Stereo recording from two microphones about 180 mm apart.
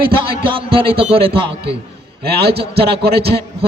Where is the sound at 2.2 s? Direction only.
60° right (ahead or behind).